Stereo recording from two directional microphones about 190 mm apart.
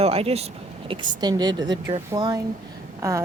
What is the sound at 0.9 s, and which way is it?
A woman's voice, 25° right (ahead or behind).